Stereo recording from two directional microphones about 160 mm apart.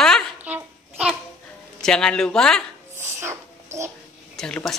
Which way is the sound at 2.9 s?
15° right (ahead or behind).